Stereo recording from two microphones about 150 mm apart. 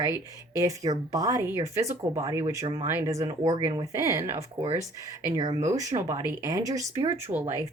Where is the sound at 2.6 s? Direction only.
45° right (ahead or behind).